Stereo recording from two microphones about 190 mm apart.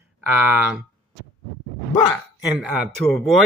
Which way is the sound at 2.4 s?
Centre (ahead or behind).